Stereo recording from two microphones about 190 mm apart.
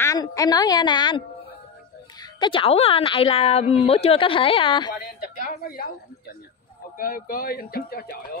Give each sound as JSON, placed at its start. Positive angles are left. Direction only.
{"t": 0.0, "sound": "a woman's voice", "side_deg": 15}
{"t": 5.6, "sound": "speech", "side_deg": 50}